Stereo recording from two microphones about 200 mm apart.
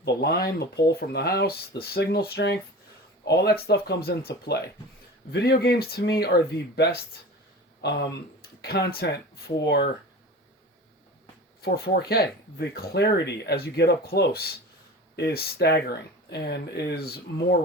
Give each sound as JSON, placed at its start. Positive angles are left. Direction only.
{"t": 0.0, "sound": "speech", "side_deg": 55}
{"t": 11.6, "sound": "speech", "side_deg": 50}